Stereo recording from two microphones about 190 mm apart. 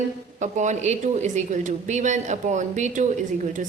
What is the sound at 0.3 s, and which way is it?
Speech, 40° right (ahead or behind).